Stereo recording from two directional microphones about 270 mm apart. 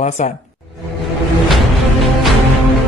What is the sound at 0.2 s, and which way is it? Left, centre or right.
Speech, left.